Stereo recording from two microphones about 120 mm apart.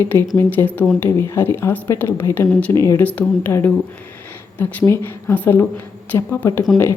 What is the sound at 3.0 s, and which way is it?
Speech, 15° left (ahead or behind).